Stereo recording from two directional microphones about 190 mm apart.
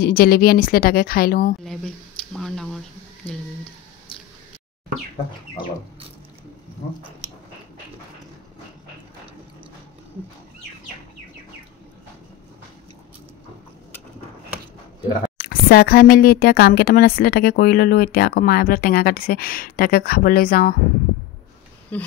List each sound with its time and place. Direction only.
0.0 s speech: 50° left (ahead or behind)
1.6 s speech: centre (ahead or behind)
15.3 s speech: 50° left (ahead or behind)
21.9 s speech: 10° left (ahead or behind)